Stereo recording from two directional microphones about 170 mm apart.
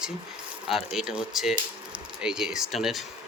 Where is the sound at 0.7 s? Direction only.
Centre (ahead or behind).